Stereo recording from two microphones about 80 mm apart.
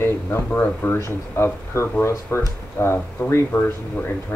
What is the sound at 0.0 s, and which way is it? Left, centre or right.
Speech, left.